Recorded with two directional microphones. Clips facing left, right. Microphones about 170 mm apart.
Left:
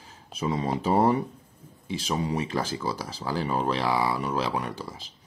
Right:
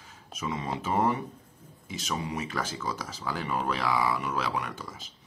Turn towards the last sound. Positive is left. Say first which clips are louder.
# left 3 dB
turn(degrees=30)  # may be behind; listen again after turning